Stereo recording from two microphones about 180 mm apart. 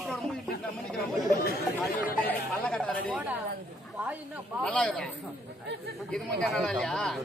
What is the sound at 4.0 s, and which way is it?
Speech, 10° right (ahead or behind).